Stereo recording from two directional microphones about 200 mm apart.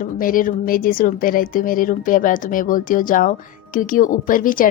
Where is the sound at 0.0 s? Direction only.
45° left (ahead or behind).